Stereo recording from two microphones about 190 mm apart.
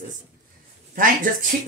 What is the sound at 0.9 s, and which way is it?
Speech, 45° right (ahead or behind).